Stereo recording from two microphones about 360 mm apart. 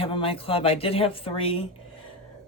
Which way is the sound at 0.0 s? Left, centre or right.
Centre.